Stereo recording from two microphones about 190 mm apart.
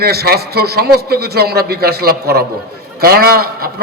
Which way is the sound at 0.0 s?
55° right (ahead or behind).